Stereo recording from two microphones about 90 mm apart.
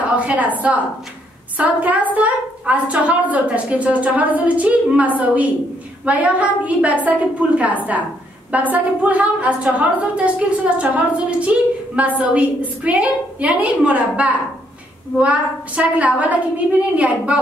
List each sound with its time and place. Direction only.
0.1 s a woman's voice: 15° right (ahead or behind)